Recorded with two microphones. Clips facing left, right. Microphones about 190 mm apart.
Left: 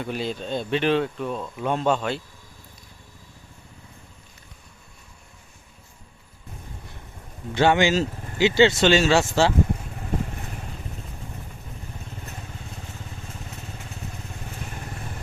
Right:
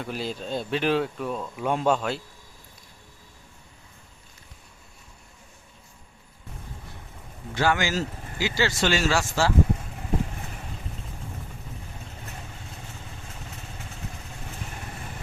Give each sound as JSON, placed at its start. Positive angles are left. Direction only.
{"t": 0.0, "sound": "speech", "side_deg": 0}
{"t": 7.5, "sound": "speech", "side_deg": 25}